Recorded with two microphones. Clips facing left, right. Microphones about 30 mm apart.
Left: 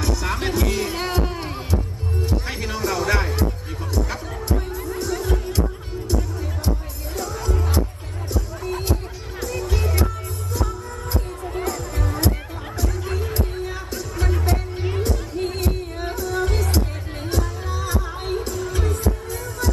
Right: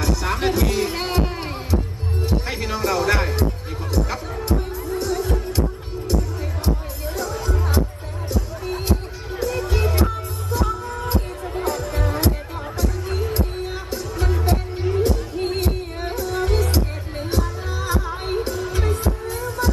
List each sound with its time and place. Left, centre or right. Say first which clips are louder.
0.0 s heart sounds: right 2 dB; centre
2.2 s music: right 3 dB; centre
4.9 s music: right 2 dB; centre
7.1 s music: right 1 dB; centre; by 12.3 s right
13.9 s music: right 2 dB; centre
19.3 s heart sounds: right 3 dB; centre